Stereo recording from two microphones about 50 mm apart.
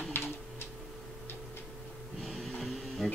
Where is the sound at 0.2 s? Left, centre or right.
Left.